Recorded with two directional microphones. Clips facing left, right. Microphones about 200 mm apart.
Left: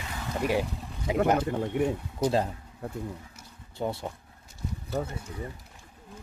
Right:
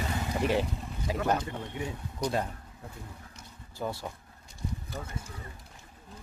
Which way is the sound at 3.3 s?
5° left (ahead or behind).